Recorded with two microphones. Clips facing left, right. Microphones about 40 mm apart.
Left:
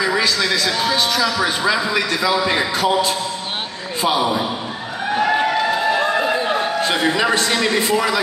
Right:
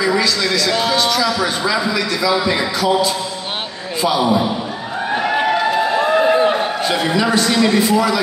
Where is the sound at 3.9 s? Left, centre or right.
Left.